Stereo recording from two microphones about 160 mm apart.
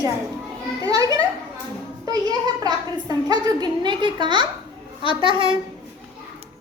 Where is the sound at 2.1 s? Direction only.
25° right (ahead or behind).